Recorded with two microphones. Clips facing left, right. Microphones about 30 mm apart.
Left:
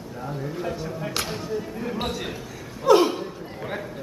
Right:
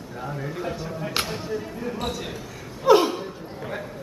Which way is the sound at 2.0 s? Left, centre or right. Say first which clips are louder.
Left 2 dB; left.